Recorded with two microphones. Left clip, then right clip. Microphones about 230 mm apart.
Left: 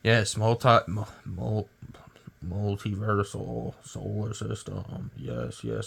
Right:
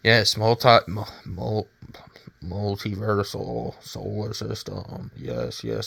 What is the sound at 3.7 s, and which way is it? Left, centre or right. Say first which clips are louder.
Speech: right 6 dB; centre.